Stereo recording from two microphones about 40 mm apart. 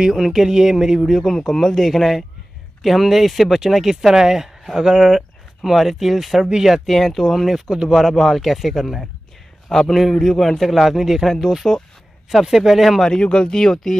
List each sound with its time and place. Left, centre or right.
0.1 s speech: centre
1.0 s speech: centre
13.0 s speech: left